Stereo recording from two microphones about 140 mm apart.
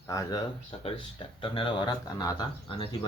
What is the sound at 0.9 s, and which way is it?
Speech, 40° left (ahead or behind).